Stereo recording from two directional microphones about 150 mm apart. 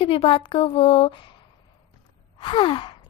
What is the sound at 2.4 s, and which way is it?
Speech, 35° left (ahead or behind).